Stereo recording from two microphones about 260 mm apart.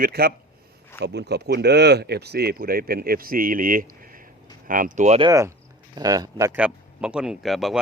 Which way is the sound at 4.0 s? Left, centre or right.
Right.